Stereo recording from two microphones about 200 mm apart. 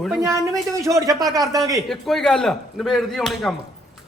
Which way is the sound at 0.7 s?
15° right (ahead or behind).